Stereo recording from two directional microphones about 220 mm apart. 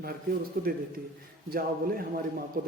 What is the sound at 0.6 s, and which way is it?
A man's voice, 40° right (ahead or behind).